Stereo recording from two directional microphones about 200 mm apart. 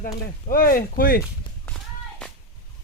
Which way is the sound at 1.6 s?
5° left (ahead or behind).